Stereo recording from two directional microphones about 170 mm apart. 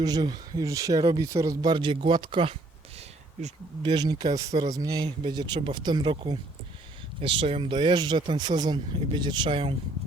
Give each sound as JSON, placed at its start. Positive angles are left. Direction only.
{"t": 0.0, "sound": "speech", "side_deg": -25}
{"t": 3.8, "sound": "speech", "side_deg": -25}